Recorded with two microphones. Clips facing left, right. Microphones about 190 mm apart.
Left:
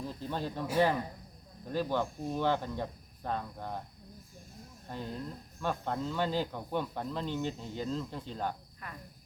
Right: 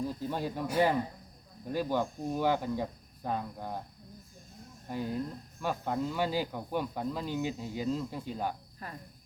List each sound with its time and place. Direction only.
0.1 s speech: 10° right (ahead or behind)
4.9 s speech: 10° right (ahead or behind)
8.8 s speech: 30° right (ahead or behind)